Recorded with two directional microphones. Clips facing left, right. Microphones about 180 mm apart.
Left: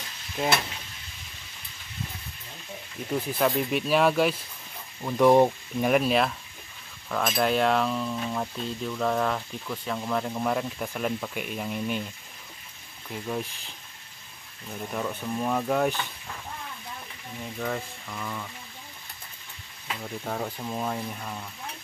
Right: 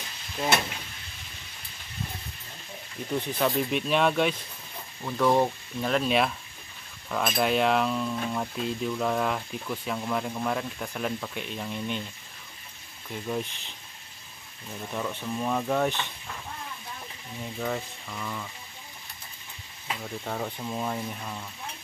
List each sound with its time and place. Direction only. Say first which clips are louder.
3.1 s speech: left 2 dB; 5° left (ahead or behind)
5.0 s speech: left 5 dB; 15° left (ahead or behind)
7.1 s speech: left 1 dB; centre (ahead or behind)
13.1 s speech: even; 5° left (ahead or behind)
14.9 s speech: left 1 dB; 5° left (ahead or behind)
17.4 s speech: even; 5° right (ahead or behind)
20.0 s speech: left 2 dB; centre (ahead or behind)